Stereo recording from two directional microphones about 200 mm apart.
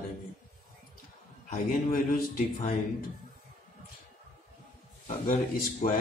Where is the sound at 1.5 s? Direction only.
45° left (ahead or behind).